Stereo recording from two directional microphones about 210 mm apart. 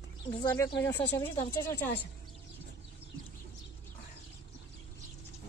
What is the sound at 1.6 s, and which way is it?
Speech, 10° left (ahead or behind).